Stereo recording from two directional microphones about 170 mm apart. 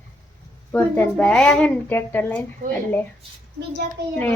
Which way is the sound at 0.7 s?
10° left (ahead or behind).